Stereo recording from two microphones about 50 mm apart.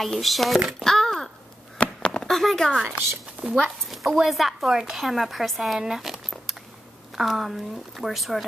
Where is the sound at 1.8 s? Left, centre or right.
Centre.